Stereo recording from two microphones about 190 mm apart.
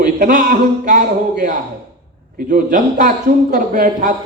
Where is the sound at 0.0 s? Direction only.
45° right (ahead or behind).